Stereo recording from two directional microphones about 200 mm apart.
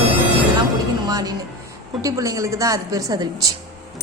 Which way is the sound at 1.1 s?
20° right (ahead or behind).